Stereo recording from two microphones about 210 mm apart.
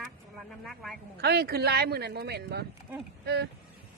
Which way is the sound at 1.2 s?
50° right (ahead or behind).